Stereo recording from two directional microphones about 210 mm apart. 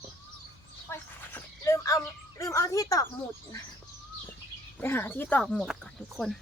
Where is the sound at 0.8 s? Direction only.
10° left (ahead or behind).